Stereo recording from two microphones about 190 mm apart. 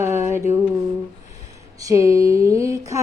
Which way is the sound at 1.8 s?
15° right (ahead or behind).